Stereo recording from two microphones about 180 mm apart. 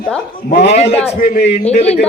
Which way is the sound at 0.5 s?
70° left (ahead or behind).